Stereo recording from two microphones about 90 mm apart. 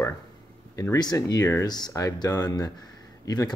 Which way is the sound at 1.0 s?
45° left (ahead or behind).